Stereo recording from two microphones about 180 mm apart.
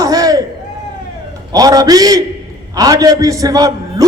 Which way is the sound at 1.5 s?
20° right (ahead or behind).